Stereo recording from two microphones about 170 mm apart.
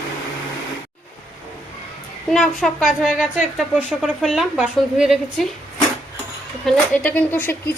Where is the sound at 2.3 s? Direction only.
Centre (ahead or behind).